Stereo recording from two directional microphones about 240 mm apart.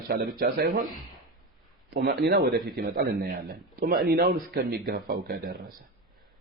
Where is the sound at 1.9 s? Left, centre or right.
Right.